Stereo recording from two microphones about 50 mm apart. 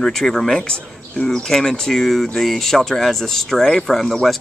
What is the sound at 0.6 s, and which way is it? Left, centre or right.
Speech, centre.